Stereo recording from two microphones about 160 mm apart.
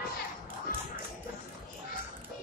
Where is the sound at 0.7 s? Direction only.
60° left (ahead or behind).